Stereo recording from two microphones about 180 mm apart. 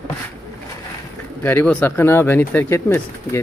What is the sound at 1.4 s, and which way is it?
Speech, 10° left (ahead or behind).